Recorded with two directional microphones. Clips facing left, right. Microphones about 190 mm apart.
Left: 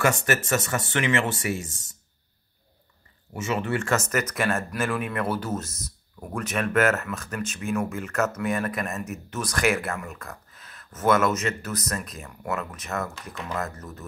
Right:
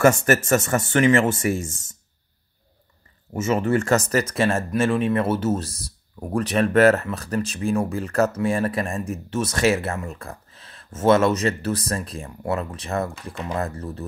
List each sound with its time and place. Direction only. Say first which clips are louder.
0.0 s speech: right 7 dB; 45° right (ahead or behind)
3.3 s speech: right 6 dB; 45° right (ahead or behind)